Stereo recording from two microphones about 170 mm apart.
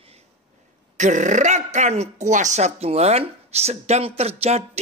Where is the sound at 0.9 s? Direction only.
45° right (ahead or behind).